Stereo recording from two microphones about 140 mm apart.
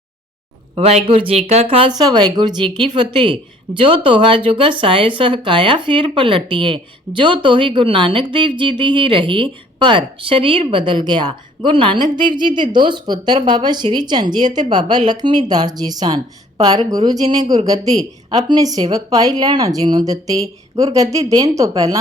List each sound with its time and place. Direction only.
0.8 s speech: 45° right (ahead or behind)
1.9 s a woman's voice: 30° right (ahead or behind)